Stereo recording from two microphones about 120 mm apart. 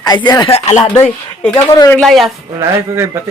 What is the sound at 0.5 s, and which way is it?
Speech, 65° left (ahead or behind).